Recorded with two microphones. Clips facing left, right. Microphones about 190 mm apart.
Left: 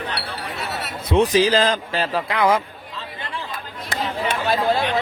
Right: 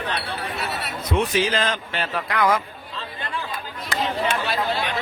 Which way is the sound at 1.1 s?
35° left (ahead or behind).